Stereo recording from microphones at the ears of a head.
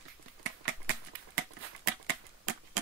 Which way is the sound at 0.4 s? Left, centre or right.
Right.